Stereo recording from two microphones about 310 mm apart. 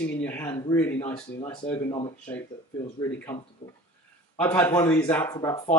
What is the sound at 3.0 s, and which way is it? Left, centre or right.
Speech, centre.